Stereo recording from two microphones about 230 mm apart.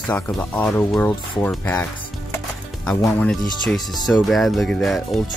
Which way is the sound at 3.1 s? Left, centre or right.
Centre.